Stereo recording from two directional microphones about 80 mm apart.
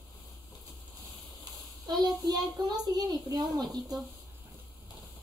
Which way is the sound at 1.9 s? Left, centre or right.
Right.